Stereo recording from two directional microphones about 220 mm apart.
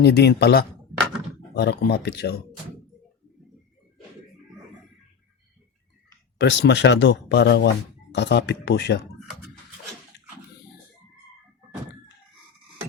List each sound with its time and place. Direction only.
0.0 s speech: 50° left (ahead or behind)
6.4 s speech: 55° left (ahead or behind)